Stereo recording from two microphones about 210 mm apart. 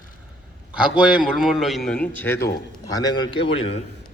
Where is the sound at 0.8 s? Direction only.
5° right (ahead or behind); by 3.8 s 25° left (ahead or behind).